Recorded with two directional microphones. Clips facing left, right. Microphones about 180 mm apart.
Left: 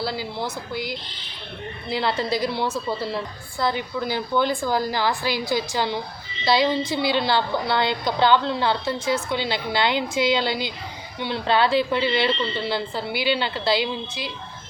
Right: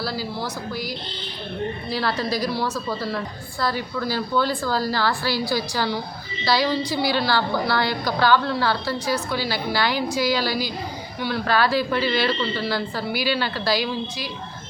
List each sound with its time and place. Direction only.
0.0 s a woman's voice: 20° left (ahead or behind)